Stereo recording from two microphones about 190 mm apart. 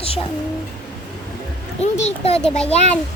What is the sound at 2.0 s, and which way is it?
Speech, 30° left (ahead or behind).